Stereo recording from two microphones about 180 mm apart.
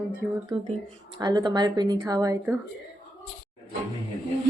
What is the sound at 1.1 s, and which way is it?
A woman's voice, 25° right (ahead or behind).